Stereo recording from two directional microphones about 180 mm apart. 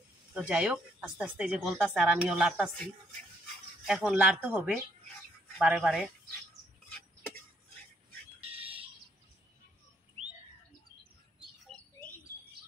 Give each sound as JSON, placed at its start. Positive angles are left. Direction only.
{"t": 0.3, "sound": "speech", "side_deg": -5}
{"t": 3.8, "sound": "speech", "side_deg": -5}
{"t": 8.5, "sound": "bird", "side_deg": -30}
{"t": 11.3, "sound": "bird", "side_deg": 5}